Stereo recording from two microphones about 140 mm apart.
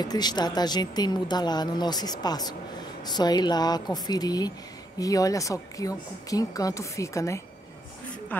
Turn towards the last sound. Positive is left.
turn(degrees=20)  # may be behind; listen again after turning